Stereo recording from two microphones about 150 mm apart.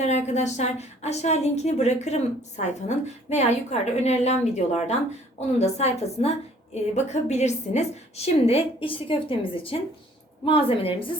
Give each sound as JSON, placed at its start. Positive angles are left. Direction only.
{"t": 0.0, "sound": "a woman's voice", "side_deg": 50}